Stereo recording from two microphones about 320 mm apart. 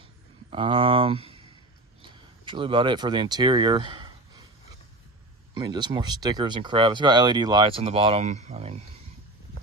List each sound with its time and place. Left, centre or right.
0.5 s speech: centre
2.0 s a sound: centre
5.5 s speech: centre